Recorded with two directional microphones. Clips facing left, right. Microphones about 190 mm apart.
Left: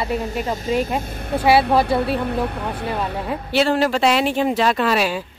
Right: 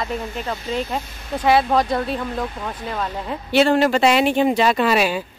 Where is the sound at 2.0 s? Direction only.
65° left (ahead or behind).